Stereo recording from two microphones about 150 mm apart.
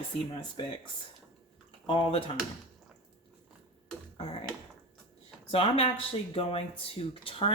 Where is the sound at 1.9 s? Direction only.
40° left (ahead or behind).